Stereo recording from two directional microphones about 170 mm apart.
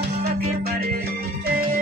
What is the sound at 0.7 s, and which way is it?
Music, 60° right (ahead or behind).